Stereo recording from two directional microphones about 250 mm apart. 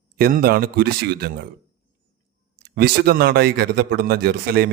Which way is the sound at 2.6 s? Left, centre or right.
Right.